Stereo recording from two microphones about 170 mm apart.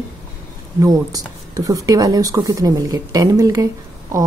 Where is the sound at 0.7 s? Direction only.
20° right (ahead or behind).